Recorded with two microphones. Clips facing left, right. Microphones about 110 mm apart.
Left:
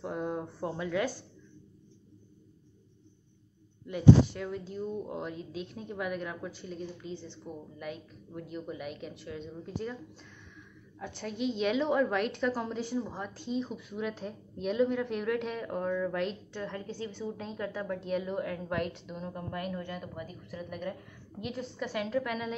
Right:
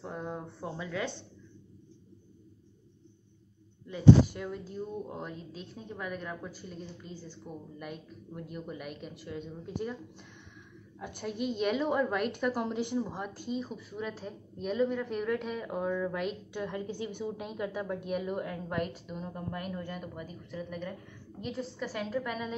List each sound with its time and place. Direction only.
0.0 s a sound: 10° left (ahead or behind)
4.3 s a woman's voice: 5° right (ahead or behind)
7.8 s a woman's voice: centre (ahead or behind)
11.0 s a woman's voice: 15° right (ahead or behind)
11.3 s a woman's voice: 50° right (ahead or behind)
11.6 s a woman's voice: 5° right (ahead or behind)